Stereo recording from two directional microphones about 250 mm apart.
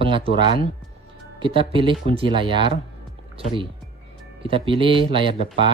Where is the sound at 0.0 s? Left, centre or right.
Right.